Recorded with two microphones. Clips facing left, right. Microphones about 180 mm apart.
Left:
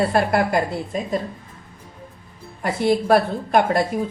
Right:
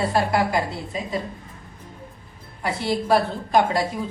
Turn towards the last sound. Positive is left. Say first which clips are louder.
# left 2 dB
turn(degrees=55)  # may be behind; listen again after turning